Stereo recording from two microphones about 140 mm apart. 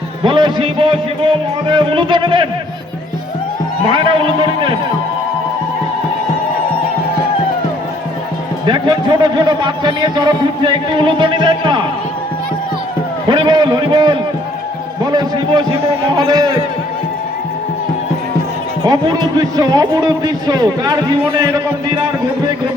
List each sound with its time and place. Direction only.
0.2 s a man's voice: 35° right (ahead or behind)
3.9 s a man's voice: 35° right (ahead or behind)
8.6 s a man's voice: 30° right (ahead or behind)
13.2 s a man's voice: 35° right (ahead or behind)
18.8 s speech: 25° right (ahead or behind)